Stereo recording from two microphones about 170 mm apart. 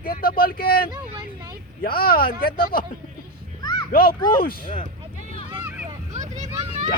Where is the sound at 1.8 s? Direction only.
60° left (ahead or behind).